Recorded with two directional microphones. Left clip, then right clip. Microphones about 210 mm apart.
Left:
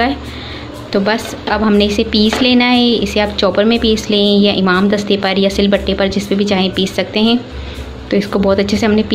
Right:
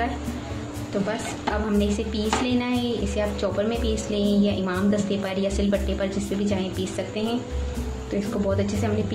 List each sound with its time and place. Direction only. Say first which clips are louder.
1.7 s speech: left 13 dB; 35° left (ahead or behind)